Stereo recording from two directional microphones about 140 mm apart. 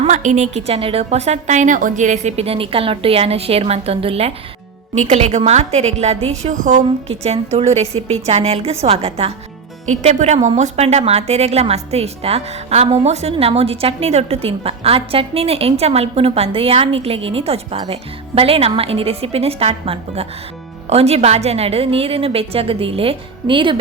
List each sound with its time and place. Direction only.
0.1 s a woman's voice: 60° right (ahead or behind); by 23.7 s 35° right (ahead or behind)